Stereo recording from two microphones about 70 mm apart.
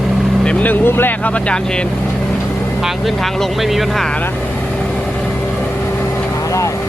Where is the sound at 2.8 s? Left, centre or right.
Centre.